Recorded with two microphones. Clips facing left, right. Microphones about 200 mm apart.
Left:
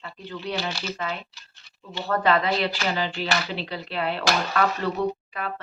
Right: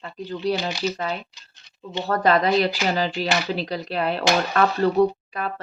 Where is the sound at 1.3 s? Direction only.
20° right (ahead or behind).